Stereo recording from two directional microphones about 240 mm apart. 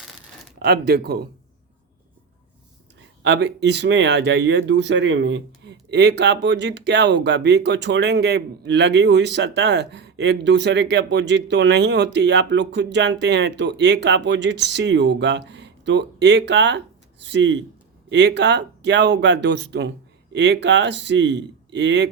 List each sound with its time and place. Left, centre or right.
0.6 s speech: right
3.2 s speech: right